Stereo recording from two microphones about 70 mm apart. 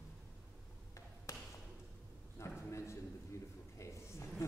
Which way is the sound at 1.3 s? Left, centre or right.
Left.